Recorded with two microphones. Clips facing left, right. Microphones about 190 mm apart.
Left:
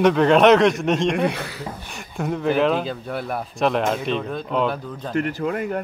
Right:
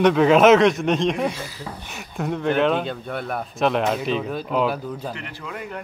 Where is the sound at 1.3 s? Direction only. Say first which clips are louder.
Left 2 dB; 65° left (ahead or behind).